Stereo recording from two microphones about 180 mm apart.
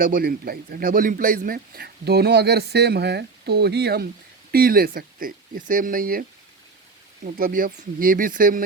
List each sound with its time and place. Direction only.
0.0 s speech: 55° right (ahead or behind)
7.3 s speech: 55° right (ahead or behind)